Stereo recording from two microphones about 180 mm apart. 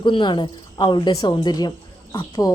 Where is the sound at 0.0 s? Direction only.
25° left (ahead or behind).